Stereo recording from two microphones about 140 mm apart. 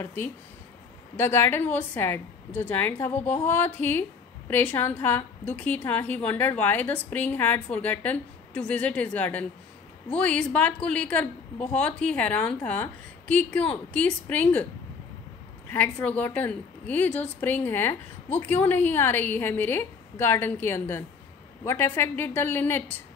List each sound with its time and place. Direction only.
0.0 s a woman's voice: 15° left (ahead or behind)
15.7 s a woman's voice: 10° left (ahead or behind)